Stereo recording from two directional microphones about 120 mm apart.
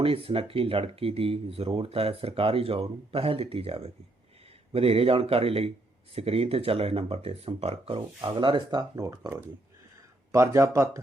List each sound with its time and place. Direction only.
0.0 s speech: 50° right (ahead or behind)
8.3 s speech: 40° right (ahead or behind)
9.0 s speech: 30° right (ahead or behind)